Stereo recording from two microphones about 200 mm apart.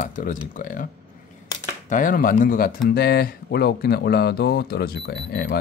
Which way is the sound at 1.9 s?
40° left (ahead or behind).